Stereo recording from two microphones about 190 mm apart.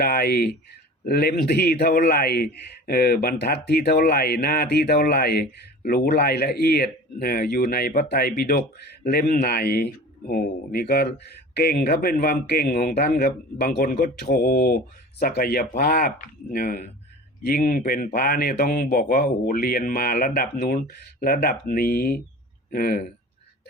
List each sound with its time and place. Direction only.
0.0 s a man's voice: 55° left (ahead or behind)